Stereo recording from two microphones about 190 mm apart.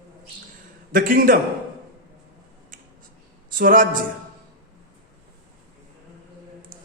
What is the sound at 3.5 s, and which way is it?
Speech, 45° right (ahead or behind).